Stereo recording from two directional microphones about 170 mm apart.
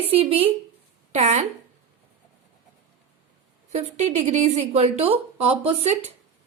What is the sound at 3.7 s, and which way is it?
A woman's voice, 40° right (ahead or behind).